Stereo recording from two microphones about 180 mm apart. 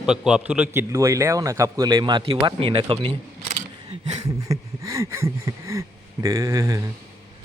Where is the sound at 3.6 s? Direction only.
40° right (ahead or behind).